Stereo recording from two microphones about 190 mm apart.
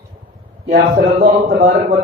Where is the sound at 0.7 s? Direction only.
50° right (ahead or behind).